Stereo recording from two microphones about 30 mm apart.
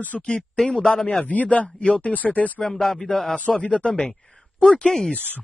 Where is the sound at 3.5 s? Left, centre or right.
Left.